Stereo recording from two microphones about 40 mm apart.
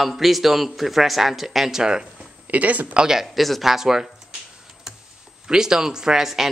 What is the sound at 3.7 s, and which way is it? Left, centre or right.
Speech, centre.